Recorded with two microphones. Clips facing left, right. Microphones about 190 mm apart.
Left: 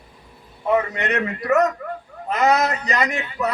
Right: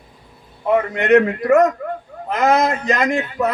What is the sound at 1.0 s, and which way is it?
Speech, 50° right (ahead or behind).